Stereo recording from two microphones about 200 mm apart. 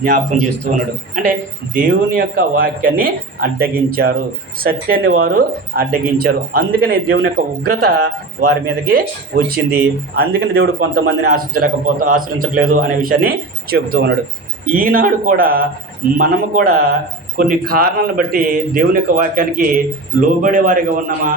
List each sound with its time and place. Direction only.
0.0 s a man's voice: 45° right (ahead or behind)
1.7 s a man's voice: 45° right (ahead or behind)